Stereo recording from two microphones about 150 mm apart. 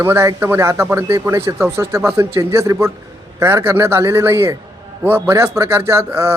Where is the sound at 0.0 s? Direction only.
20° right (ahead or behind).